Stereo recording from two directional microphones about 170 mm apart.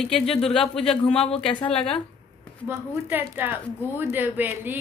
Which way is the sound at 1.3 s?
35° left (ahead or behind).